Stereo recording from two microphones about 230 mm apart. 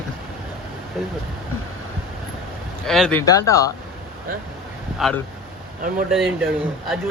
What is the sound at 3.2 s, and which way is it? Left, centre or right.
Speech, centre.